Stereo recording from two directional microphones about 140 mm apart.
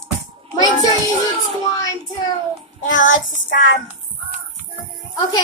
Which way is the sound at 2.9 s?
70° left (ahead or behind).